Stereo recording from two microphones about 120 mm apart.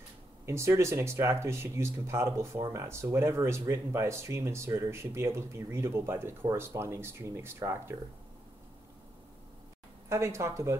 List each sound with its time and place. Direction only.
0.5 s speech: 25° right (ahead or behind)
10.0 s speech: 25° right (ahead or behind)